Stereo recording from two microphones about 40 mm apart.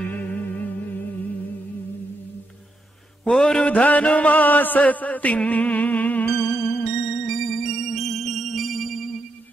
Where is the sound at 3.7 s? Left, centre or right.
Left.